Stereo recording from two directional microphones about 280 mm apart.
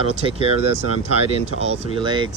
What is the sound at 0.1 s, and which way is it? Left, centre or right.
Speech, centre.